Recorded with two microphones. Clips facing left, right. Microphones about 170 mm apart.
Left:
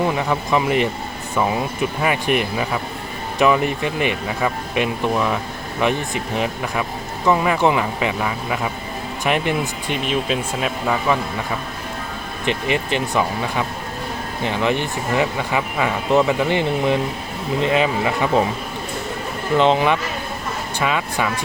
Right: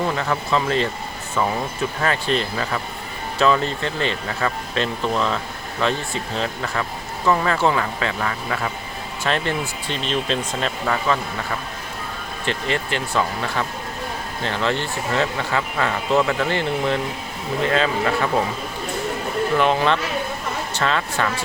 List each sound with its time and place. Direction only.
0.0 s speech: 15° left (ahead or behind)
12.5 s speech: 15° left (ahead or behind)
19.5 s speech: 20° left (ahead or behind)